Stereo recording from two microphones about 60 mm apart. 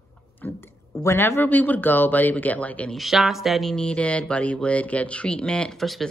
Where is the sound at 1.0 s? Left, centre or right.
Left.